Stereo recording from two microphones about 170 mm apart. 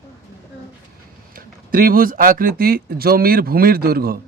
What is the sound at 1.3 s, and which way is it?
Speech, 60° right (ahead or behind).